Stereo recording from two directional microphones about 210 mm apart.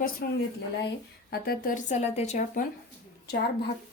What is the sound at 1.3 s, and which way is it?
A woman's voice, 45° left (ahead or behind).